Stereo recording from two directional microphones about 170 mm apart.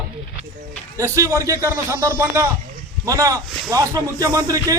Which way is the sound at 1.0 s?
15° right (ahead or behind).